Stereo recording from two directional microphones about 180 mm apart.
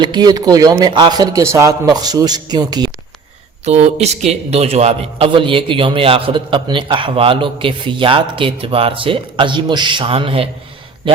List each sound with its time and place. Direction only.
0.0 s a man's voice: 25° right (ahead or behind)
3.7 s a man's voice: 35° right (ahead or behind)